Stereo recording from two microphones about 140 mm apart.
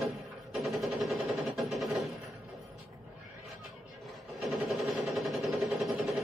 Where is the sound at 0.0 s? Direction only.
Centre (ahead or behind).